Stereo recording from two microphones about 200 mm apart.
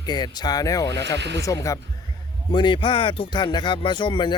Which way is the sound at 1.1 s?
60° right (ahead or behind).